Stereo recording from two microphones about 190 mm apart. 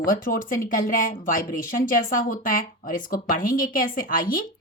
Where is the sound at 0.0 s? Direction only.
50° left (ahead or behind).